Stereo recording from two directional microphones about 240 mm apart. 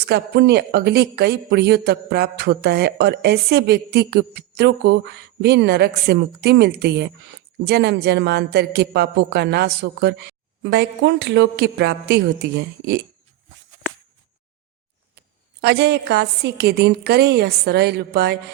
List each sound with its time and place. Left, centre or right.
0.0 s speech: right
15.6 s speech: right